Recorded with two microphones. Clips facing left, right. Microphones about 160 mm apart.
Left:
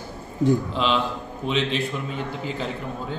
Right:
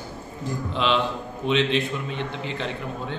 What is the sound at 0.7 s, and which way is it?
A man's voice, centre (ahead or behind).